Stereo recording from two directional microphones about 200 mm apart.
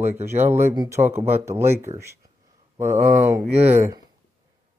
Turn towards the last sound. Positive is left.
turn(degrees=-15)  # may be behind; listen again after turning